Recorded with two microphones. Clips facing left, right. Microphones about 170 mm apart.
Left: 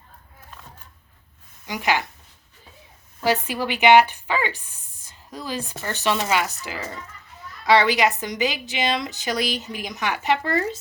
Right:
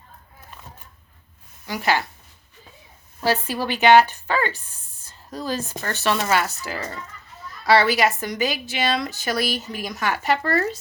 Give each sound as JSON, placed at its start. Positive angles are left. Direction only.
{"t": 1.6, "sound": "speech", "side_deg": 15}
{"t": 3.2, "sound": "a woman's voice", "side_deg": 15}
{"t": 7.7, "sound": "a woman's voice", "side_deg": 15}